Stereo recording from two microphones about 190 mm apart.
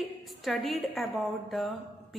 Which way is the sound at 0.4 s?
Centre (ahead or behind).